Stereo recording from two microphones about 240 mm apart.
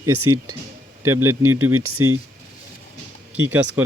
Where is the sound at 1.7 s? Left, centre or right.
Right.